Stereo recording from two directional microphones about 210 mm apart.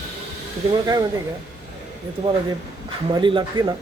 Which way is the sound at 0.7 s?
15° right (ahead or behind).